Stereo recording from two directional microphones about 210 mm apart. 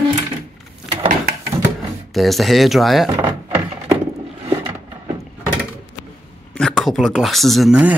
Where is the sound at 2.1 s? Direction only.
Centre (ahead or behind).